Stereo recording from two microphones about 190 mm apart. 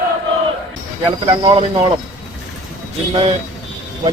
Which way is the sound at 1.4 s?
30° right (ahead or behind).